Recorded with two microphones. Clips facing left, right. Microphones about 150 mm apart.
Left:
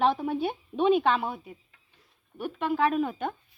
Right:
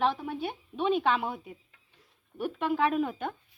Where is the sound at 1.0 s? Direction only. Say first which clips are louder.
Left 2 dB; 10° right (ahead or behind).